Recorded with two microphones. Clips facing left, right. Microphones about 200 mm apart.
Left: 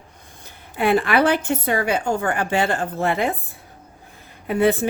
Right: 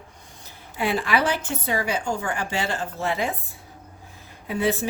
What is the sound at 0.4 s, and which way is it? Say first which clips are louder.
A woman's voice: left 6 dB; 55° left (ahead or behind).